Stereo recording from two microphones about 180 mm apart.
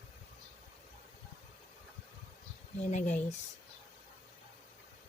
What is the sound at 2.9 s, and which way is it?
Speech, 45° left (ahead or behind).